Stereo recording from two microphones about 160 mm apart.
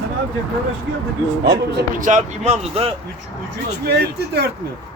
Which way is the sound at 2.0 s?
50° right (ahead or behind).